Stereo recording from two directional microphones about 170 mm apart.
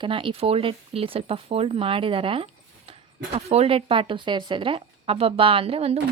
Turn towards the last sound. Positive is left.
turn(degrees=-35)  # may be behind; listen again after turning